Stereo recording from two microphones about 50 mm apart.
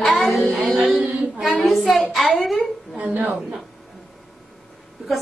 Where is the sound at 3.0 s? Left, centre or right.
Right.